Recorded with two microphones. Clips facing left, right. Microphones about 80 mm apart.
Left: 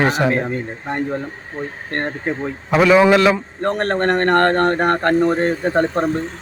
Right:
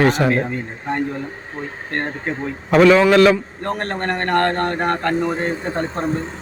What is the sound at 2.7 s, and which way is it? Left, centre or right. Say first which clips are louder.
Speech: right 1 dB; centre.